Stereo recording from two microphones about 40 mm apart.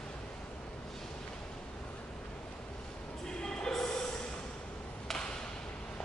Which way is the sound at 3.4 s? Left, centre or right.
Centre.